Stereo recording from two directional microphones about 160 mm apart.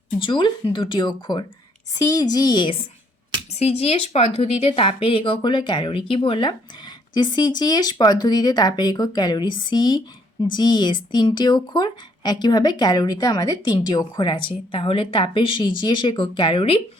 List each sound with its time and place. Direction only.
0.2 s a woman's voice: 30° left (ahead or behind)